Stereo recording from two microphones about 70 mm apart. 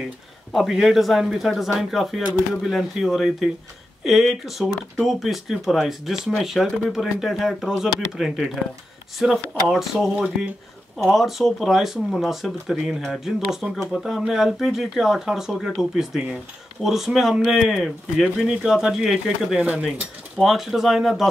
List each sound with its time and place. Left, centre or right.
0.6 s speech: centre
10.1 s speech: centre
11.0 s speech: centre
19.6 s speech: centre
20.3 s speech: centre